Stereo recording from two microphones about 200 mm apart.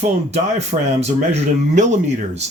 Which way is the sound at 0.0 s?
35° right (ahead or behind).